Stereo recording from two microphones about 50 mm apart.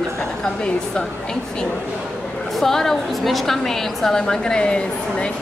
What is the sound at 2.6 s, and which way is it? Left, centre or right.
A woman's voice, centre.